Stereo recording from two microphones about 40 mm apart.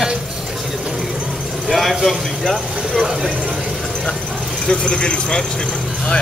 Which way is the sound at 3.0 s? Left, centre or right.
Centre.